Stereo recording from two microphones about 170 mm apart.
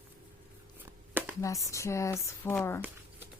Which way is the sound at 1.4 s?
20° left (ahead or behind).